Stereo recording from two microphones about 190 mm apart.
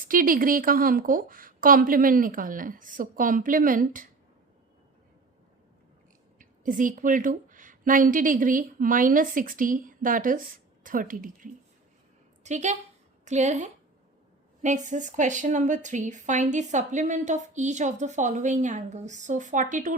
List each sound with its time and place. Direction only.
0.0 s a woman's voice: 45° right (ahead or behind)
6.4 s a woman's voice: 45° right (ahead or behind)